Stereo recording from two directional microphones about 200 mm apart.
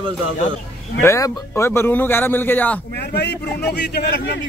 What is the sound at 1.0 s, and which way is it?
Speech, 15° left (ahead or behind).